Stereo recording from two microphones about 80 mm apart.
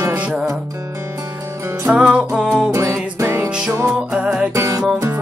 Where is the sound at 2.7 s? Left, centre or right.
Right.